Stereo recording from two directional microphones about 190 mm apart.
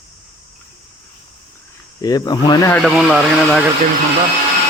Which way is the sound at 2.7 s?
Centre (ahead or behind).